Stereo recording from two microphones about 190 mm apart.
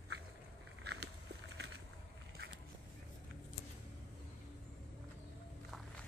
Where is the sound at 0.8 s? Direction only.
60° right (ahead or behind).